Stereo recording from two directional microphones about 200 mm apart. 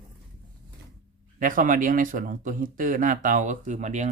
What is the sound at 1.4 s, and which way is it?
Speech, 40° right (ahead or behind).